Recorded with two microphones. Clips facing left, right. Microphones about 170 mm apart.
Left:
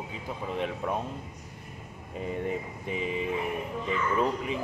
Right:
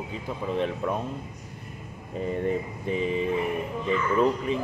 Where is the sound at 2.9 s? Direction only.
10° left (ahead or behind).